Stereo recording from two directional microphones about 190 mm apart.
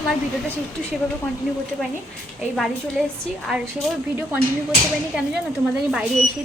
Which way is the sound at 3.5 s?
Centre (ahead or behind).